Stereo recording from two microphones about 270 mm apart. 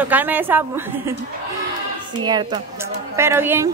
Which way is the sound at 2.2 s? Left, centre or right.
Centre.